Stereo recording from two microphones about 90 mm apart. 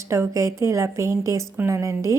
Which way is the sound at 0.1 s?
35° right (ahead or behind).